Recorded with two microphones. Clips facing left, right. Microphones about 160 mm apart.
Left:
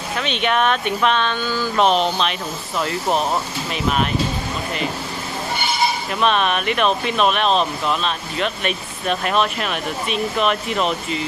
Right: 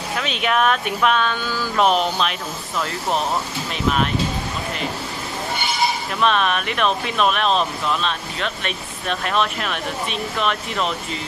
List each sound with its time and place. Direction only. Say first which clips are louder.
0.2 s speech: left 1 dB; 5° right (ahead or behind)
6.2 s speech: left 1 dB; centre (ahead or behind)